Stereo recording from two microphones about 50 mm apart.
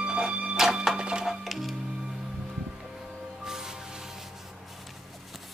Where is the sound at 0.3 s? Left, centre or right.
Right.